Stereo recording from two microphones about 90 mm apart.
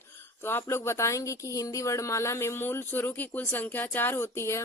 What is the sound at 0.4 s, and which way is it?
A woman's voice, 25° left (ahead or behind).